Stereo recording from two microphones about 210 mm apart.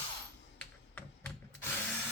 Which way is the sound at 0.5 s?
5° left (ahead or behind).